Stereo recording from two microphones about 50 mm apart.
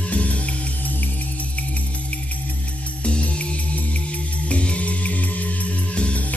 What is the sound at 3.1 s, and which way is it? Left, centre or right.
Music, left.